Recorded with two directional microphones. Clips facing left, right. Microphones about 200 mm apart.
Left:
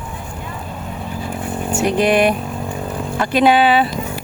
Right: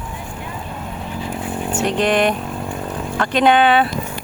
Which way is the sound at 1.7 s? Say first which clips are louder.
Left 3 dB; 10° left (ahead or behind).